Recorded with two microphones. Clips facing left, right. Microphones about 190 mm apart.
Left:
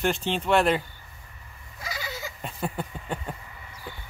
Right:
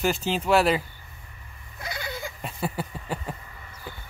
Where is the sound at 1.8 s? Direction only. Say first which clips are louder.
Right 1 dB; 60° right (ahead or behind).